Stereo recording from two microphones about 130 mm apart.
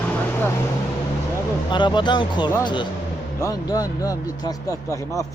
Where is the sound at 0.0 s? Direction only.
15° left (ahead or behind).